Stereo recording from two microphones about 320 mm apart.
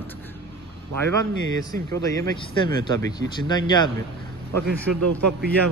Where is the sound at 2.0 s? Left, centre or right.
Centre.